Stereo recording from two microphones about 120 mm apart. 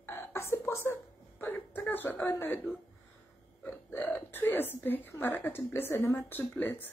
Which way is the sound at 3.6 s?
15° left (ahead or behind).